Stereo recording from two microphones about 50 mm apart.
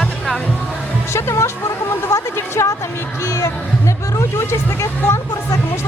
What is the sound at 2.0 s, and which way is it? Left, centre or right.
Speech, left.